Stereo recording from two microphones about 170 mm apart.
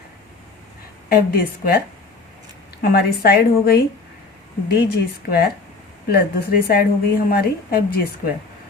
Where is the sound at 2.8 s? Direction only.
65° left (ahead or behind).